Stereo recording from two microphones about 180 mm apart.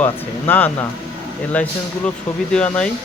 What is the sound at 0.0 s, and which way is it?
Speech, 10° left (ahead or behind).